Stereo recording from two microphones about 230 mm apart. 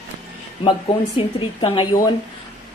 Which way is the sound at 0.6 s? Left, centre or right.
Left.